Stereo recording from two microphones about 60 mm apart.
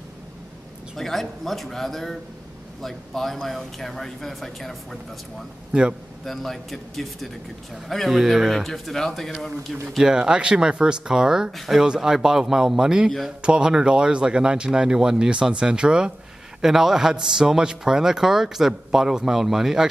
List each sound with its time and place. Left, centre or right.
0.9 s a man's voice: centre
5.7 s a man's voice: centre
6.2 s a man's voice: centre
9.8 s a man's voice: centre